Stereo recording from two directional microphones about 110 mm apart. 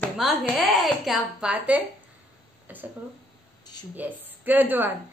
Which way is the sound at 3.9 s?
15° right (ahead or behind).